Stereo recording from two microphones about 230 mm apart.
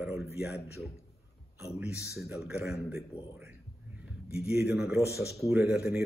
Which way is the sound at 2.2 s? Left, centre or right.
Centre.